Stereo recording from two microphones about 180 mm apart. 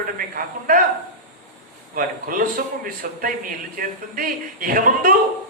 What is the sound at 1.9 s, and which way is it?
A man's voice, 50° right (ahead or behind).